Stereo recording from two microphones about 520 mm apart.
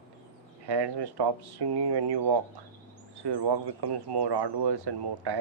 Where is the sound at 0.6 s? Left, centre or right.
Right.